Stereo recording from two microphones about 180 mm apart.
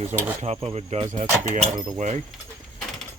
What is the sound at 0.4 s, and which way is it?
Speech, 35° right (ahead or behind).